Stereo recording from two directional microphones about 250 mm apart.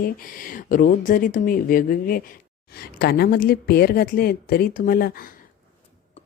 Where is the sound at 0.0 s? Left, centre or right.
Left.